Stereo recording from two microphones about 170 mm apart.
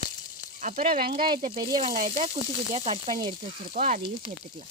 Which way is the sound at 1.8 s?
50° right (ahead or behind).